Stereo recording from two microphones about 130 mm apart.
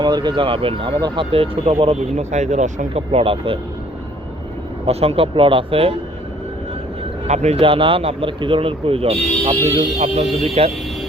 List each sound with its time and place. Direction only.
0.0 s speech: 35° right (ahead or behind); by 2.8 s 70° right (ahead or behind)
2.9 s speech: 50° right (ahead or behind)
4.9 s speech: 50° right (ahead or behind)
7.3 s speech: 60° right (ahead or behind)